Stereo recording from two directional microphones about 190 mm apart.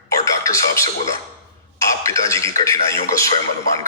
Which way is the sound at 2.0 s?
15° left (ahead or behind).